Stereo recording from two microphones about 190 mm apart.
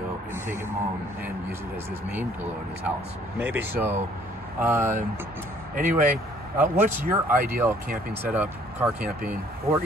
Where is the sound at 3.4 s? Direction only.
10° right (ahead or behind).